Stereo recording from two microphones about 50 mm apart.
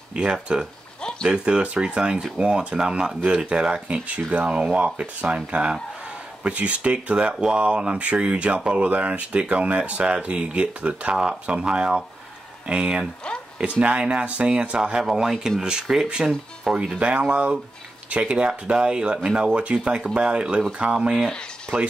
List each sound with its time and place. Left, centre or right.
0.1 s speech: centre
4.1 s speech: right; by 16.8 s centre
17.0 s speech: right
21.7 s speech: right